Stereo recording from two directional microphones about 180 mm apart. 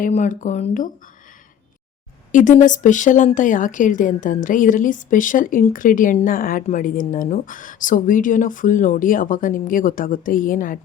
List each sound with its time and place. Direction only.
0.0 s a woman's voice: 45° left (ahead or behind)
2.3 s a woman's voice: 45° left (ahead or behind)